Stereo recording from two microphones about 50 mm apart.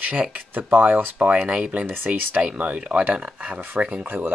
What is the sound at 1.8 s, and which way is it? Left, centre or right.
Speech, right.